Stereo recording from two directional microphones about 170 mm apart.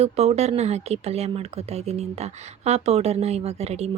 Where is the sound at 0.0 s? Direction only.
40° right (ahead or behind).